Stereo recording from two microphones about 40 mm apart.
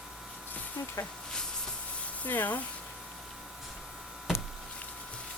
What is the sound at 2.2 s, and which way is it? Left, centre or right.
Speech, left.